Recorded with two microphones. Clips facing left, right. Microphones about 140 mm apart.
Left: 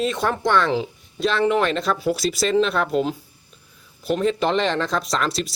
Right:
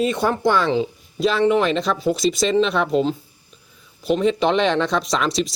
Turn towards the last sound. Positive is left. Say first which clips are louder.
# right 3 dB
turn(degrees=0)  # may be behind; listen again after turning